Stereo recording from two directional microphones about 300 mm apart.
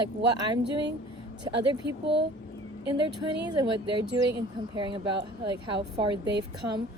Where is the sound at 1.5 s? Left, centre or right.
Centre.